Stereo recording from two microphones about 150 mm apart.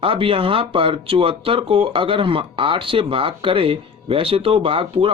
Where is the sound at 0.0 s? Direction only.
35° right (ahead or behind).